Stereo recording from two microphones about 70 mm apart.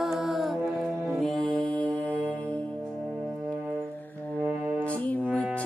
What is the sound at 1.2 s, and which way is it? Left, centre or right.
Music, centre.